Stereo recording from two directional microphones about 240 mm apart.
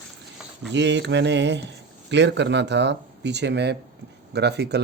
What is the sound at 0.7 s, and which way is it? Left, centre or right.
Speech, right.